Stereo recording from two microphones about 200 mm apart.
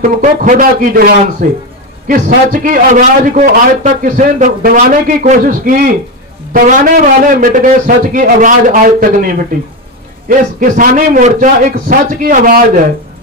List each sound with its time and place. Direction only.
0.0 s a man's voice: 40° right (ahead or behind)